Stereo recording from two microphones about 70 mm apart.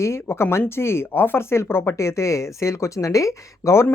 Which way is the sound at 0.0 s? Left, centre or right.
Left.